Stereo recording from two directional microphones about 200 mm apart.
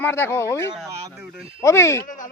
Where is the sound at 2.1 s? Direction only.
40° left (ahead or behind).